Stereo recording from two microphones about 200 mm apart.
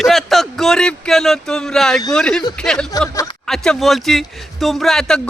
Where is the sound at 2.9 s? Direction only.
15° left (ahead or behind).